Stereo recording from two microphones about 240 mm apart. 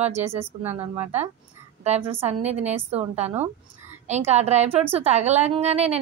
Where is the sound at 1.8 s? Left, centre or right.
Right.